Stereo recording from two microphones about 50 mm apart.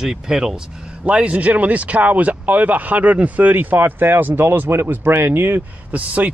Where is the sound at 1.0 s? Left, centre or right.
Right.